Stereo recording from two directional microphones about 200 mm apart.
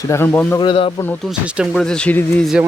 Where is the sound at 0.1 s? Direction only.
10° left (ahead or behind).